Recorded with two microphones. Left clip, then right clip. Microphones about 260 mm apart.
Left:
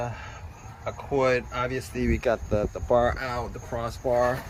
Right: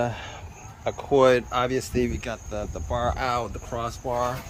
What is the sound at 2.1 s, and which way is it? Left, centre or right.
Cricket, centre.